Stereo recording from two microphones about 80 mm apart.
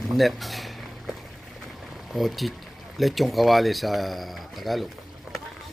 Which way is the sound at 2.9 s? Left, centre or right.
Centre.